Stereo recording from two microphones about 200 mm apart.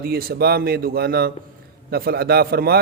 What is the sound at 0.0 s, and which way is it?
A man's voice, 50° right (ahead or behind).